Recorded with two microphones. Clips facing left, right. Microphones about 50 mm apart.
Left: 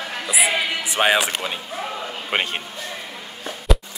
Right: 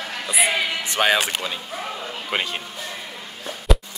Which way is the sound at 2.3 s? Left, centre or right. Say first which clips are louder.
Left 2 dB; left.